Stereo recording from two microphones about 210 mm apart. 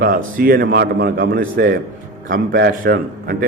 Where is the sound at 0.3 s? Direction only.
45° right (ahead or behind).